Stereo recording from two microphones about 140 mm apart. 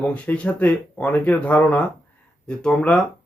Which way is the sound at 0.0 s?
10° left (ahead or behind).